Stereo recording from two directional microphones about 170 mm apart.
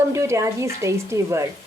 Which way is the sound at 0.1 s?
15° right (ahead or behind).